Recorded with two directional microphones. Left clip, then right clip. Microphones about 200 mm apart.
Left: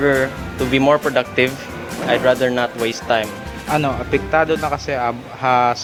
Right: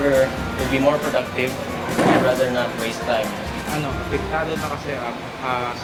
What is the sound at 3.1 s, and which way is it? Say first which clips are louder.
Speech: left 3 dB; 60° left (ahead or behind).